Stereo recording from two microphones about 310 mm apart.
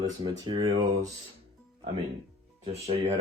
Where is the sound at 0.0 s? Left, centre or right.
Centre.